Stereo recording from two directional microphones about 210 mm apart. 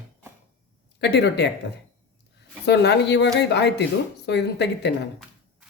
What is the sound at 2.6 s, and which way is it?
A woman's voice, 55° left (ahead or behind).